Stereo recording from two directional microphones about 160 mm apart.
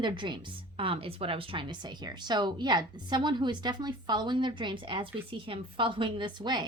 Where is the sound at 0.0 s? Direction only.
30° right (ahead or behind).